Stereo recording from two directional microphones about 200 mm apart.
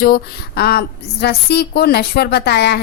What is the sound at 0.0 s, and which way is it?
A woman's voice, 50° left (ahead or behind).